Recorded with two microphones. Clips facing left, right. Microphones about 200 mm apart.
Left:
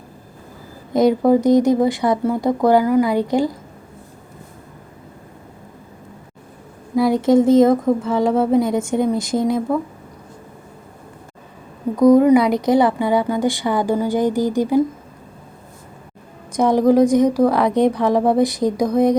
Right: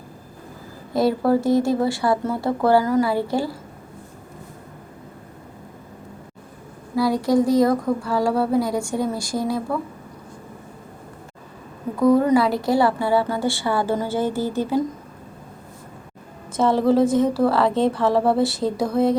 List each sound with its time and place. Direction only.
0.9 s a woman's voice: 20° left (ahead or behind)
6.9 s a sound: 20° left (ahead or behind)
11.9 s a woman's voice: 15° left (ahead or behind)
16.5 s a woman's voice: 15° left (ahead or behind)